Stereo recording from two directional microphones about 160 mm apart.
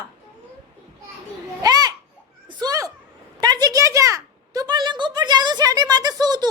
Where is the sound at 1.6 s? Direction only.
25° right (ahead or behind).